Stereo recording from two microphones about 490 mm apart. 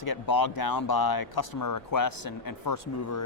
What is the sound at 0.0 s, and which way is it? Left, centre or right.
Speech, left.